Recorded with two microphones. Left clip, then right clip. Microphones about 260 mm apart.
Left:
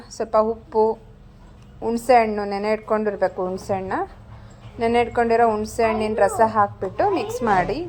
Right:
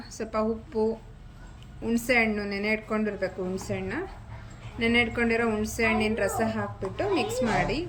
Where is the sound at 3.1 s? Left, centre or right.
Left.